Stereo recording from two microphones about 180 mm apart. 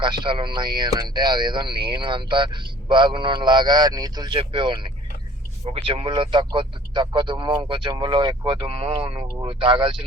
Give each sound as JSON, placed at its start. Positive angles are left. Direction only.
{"t": 0.0, "sound": "speech", "side_deg": -25}